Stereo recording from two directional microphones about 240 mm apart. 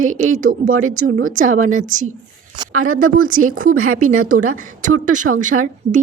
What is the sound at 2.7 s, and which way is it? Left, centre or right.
Speech, right.